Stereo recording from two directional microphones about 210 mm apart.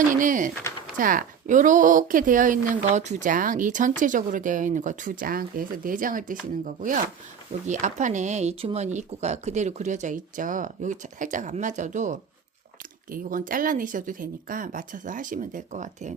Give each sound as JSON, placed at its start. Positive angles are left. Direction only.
{"t": 0.1, "sound": "speech", "side_deg": -40}